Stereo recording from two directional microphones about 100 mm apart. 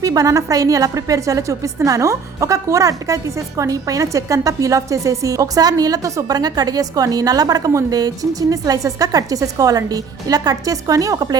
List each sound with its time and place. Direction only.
0.0 s a woman's voice: 35° right (ahead or behind)